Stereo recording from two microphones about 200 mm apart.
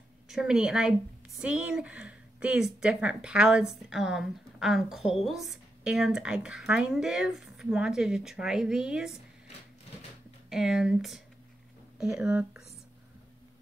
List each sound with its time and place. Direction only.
0.3 s speech: 5° right (ahead or behind)
10.5 s speech: 5° right (ahead or behind)